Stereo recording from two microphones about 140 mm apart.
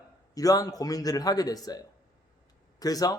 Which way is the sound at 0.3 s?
25° left (ahead or behind).